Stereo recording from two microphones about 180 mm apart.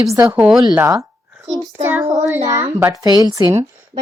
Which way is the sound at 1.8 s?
10° right (ahead or behind).